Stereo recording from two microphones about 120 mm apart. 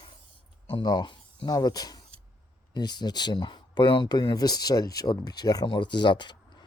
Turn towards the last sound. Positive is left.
turn(degrees=40)  # may be behind; listen again after turning